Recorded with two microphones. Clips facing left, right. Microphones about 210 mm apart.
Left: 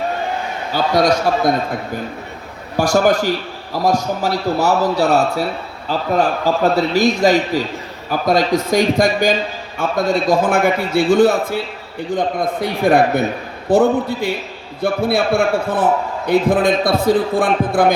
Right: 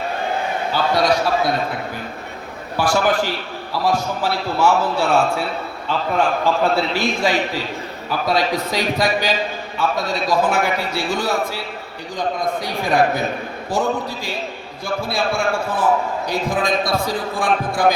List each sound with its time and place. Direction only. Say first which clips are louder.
0.7 s a man's voice: left 3 dB; 45° left (ahead or behind)
2.7 s a man's voice: left 4 dB; 45° left (ahead or behind)